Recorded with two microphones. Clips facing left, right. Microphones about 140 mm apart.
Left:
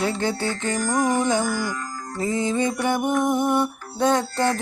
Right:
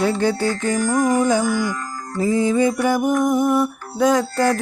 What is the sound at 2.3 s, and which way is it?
Music, 25° left (ahead or behind).